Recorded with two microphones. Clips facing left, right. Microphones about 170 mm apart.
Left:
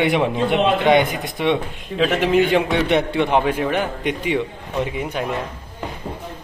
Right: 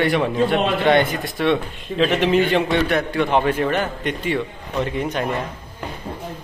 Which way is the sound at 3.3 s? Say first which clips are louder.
Right 2 dB; 10° left (ahead or behind).